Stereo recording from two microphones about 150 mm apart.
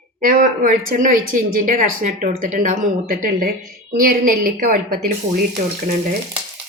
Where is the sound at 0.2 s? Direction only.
65° right (ahead or behind).